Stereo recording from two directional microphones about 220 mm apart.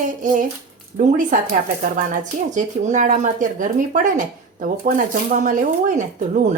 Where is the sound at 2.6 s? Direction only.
35° right (ahead or behind).